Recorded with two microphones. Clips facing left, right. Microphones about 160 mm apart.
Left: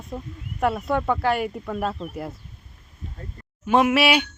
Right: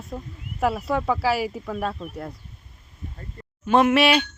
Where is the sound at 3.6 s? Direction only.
10° left (ahead or behind).